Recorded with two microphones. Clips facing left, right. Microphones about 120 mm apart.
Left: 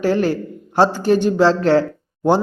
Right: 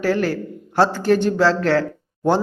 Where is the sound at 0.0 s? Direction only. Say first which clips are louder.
Left 2 dB; 20° left (ahead or behind).